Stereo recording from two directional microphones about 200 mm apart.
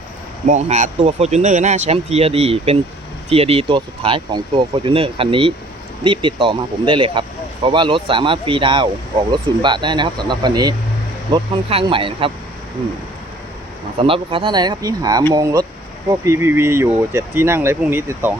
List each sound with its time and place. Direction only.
0.4 s speech: 35° right (ahead or behind)
14.0 s speech: 25° right (ahead or behind); by 18.3 s 10° right (ahead or behind)